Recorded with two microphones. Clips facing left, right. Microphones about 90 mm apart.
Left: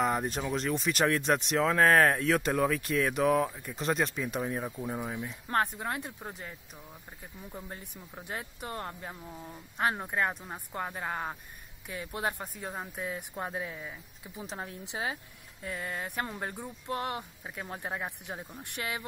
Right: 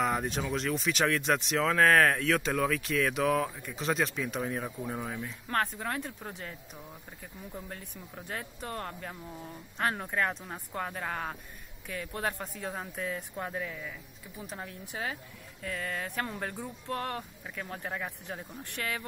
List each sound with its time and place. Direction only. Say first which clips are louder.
0.0 s speech: left 1 dB; centre (ahead or behind)
5.0 s speech: left 1 dB; 15° left (ahead or behind)
7.5 s speech: even; 15° left (ahead or behind)
17.6 s speech: even; 25° left (ahead or behind)